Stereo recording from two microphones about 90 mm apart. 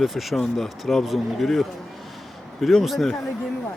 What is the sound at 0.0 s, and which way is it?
Speech, centre (ahead or behind).